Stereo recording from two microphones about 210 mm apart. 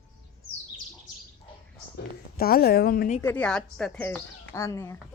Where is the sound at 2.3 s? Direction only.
45° left (ahead or behind).